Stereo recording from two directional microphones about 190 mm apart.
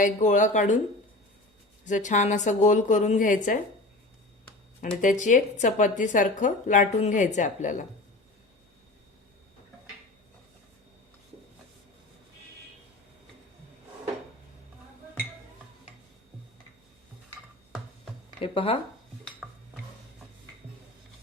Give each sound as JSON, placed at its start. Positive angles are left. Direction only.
{"t": 0.0, "sound": "speech", "side_deg": 40}
{"t": 1.9, "sound": "speech", "side_deg": 40}
{"t": 4.9, "sound": "speech", "side_deg": 40}
{"t": 18.3, "sound": "speech", "side_deg": 30}